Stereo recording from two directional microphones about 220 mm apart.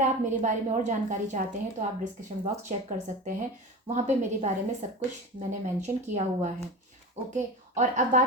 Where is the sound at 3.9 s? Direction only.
30° right (ahead or behind).